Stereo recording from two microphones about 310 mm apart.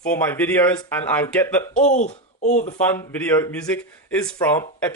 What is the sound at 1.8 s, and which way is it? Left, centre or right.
Speech, left.